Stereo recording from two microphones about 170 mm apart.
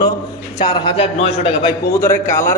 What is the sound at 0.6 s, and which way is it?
A man's voice, 30° left (ahead or behind).